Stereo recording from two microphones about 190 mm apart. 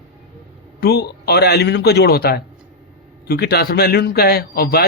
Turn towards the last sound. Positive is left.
turn(degrees=55)  # may be behind; listen again after turning